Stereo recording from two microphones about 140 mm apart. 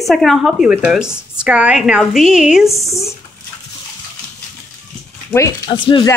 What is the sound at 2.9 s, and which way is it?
Speech, 20° left (ahead or behind).